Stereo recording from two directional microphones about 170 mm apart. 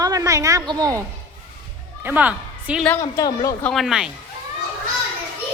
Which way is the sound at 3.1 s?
20° left (ahead or behind).